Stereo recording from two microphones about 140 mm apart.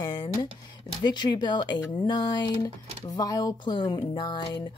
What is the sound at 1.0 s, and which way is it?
Speech, 30° left (ahead or behind).